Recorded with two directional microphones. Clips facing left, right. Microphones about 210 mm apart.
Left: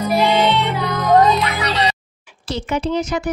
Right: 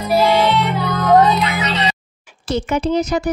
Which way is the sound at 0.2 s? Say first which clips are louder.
Right 2 dB; 20° left (ahead or behind).